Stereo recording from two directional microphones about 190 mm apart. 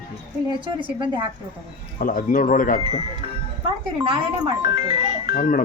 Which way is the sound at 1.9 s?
45° left (ahead or behind).